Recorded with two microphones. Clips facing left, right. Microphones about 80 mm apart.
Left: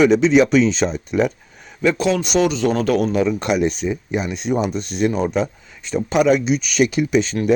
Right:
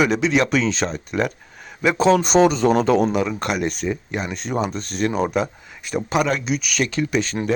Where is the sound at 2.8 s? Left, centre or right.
Right.